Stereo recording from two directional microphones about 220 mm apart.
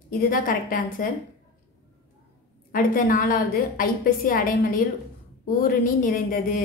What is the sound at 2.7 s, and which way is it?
A woman's voice, 40° left (ahead or behind).